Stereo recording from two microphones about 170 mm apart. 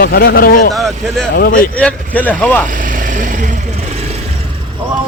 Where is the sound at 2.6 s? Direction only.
50° right (ahead or behind).